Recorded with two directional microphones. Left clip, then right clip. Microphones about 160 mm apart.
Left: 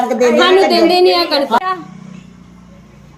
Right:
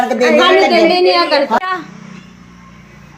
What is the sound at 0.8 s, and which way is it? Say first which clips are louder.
Speech: even; 30° left (ahead or behind).